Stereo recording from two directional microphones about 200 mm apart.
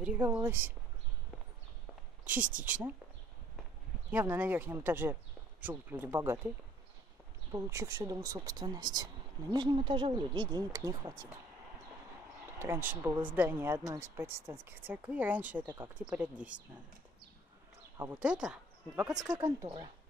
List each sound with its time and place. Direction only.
0.0 s speech: 5° right (ahead or behind)
2.2 s speech: 10° right (ahead or behind)
4.1 s speech: 10° right (ahead or behind)
7.5 s speech: 15° right (ahead or behind)
12.5 s speech: 10° right (ahead or behind)
17.9 s speech: 10° right (ahead or behind)
19.2 s speech: 20° right (ahead or behind)